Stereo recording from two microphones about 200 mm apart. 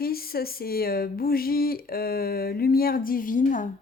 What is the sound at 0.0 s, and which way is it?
Speech, 50° left (ahead or behind).